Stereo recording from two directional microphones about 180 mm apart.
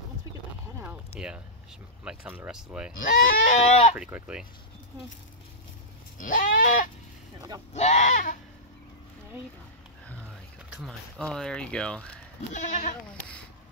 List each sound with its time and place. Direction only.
1.2 s speech: 5° right (ahead or behind)
3.0 s speech: 50° left (ahead or behind)
3.9 s speech: 5° right (ahead or behind)
6.1 s speech: 50° left (ahead or behind)
7.3 s speech: 20° right (ahead or behind)
7.7 s speech: 40° left (ahead or behind)
10.7 s speech: centre (ahead or behind)
12.5 s speech: 45° left (ahead or behind)
13.1 s speech: 5° left (ahead or behind)